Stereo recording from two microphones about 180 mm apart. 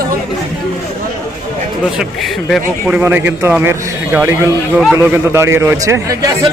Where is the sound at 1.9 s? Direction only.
Centre (ahead or behind); by 6.3 s 20° right (ahead or behind).